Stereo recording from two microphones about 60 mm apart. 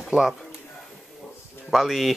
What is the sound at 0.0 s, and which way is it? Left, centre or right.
Speech, centre.